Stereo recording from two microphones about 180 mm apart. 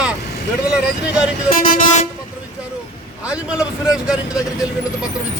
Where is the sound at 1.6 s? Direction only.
45° left (ahead or behind).